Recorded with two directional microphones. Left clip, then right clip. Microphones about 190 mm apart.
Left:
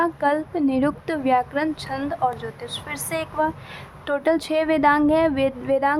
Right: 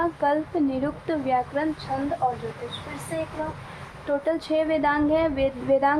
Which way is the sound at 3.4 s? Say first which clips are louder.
Left 8 dB; 40° left (ahead or behind).